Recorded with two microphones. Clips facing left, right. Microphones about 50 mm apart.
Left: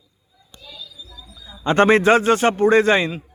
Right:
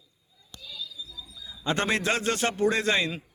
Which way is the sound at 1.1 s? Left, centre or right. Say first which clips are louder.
Left 2 dB; left.